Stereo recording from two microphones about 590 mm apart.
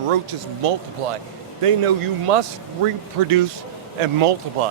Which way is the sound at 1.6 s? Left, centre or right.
Right.